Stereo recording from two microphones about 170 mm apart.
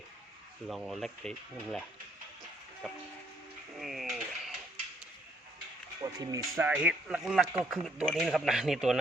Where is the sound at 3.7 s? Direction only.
Centre (ahead or behind).